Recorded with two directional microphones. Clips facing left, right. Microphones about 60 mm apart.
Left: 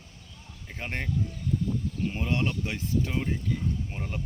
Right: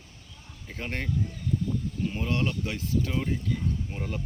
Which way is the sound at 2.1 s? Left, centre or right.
Centre.